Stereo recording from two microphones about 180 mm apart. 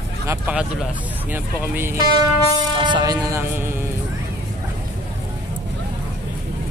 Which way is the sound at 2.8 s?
25° right (ahead or behind).